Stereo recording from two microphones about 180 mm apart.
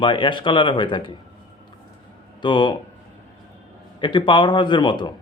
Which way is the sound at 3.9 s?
25° left (ahead or behind).